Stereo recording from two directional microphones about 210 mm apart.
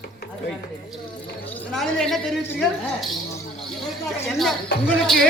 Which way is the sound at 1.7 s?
Centre (ahead or behind).